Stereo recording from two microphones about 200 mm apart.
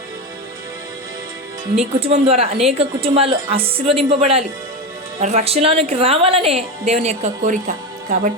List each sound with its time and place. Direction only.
1.7 s a woman's voice: 30° right (ahead or behind)